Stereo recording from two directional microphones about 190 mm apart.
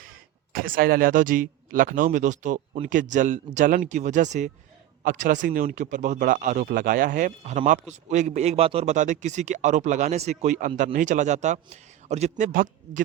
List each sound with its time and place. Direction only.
0.5 s a man's voice: 50° right (ahead or behind)